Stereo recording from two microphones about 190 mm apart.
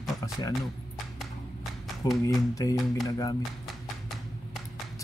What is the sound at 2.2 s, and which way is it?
Speech, 15° left (ahead or behind).